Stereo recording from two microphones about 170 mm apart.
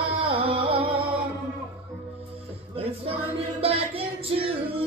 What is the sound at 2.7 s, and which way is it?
Music, 35° right (ahead or behind).